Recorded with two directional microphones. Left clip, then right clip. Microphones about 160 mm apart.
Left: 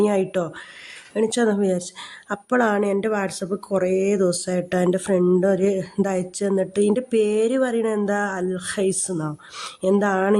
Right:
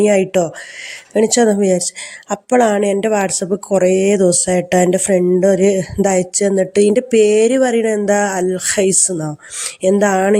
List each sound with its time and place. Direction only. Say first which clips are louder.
0.0 s speech: right 8 dB; 15° right (ahead or behind)